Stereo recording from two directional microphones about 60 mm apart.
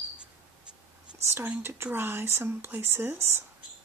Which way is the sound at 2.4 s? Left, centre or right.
Right.